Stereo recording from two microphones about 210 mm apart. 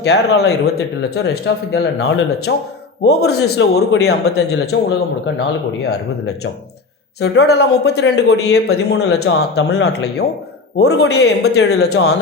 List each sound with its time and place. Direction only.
0.0 s speech: 50° left (ahead or behind)